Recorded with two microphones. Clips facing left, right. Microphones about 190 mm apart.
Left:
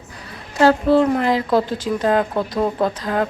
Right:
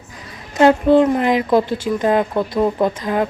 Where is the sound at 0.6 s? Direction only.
20° right (ahead or behind).